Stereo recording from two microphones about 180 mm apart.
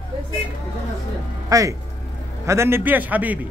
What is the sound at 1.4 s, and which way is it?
A man's voice, 20° right (ahead or behind).